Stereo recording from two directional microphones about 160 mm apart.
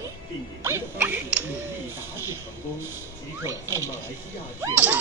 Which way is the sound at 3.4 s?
15° right (ahead or behind).